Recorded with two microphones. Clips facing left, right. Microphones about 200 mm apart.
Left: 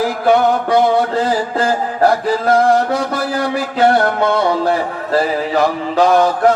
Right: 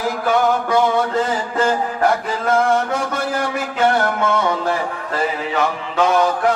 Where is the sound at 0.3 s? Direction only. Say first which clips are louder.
Left 4 dB; 35° left (ahead or behind).